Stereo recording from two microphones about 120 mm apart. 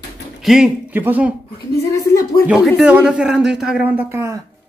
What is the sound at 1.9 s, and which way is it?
Speech, 25° left (ahead or behind).